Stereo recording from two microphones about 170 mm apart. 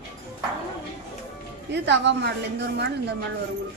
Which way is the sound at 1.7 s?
90° right.